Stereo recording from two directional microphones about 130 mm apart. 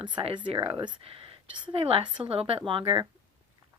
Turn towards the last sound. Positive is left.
turn(degrees=-40)  # may be behind; listen again after turning